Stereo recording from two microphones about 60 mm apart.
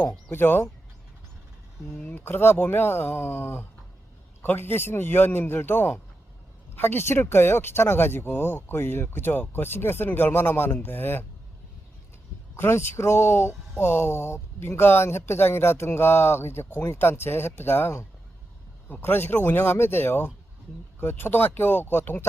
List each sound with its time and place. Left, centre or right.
0.1 s speech: left
2.1 s speech: left
12.5 s speech: left